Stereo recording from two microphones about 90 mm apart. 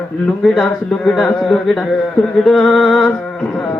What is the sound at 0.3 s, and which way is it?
Speech, 10° left (ahead or behind).